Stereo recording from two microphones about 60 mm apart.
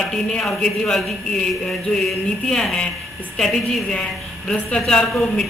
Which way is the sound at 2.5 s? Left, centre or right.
Centre.